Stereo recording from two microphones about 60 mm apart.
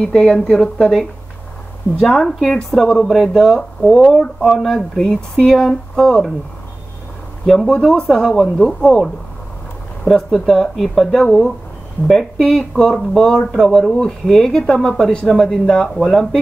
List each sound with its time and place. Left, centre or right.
0.0 s speech: centre
2.0 s speech: centre
7.4 s speech: centre